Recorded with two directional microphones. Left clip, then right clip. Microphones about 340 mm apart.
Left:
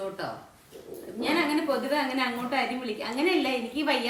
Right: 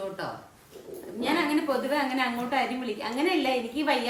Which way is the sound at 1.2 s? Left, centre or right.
Centre.